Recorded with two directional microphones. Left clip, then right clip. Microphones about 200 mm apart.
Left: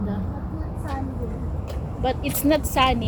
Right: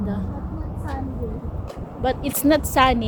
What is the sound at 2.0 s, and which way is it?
Speech, 10° right (ahead or behind).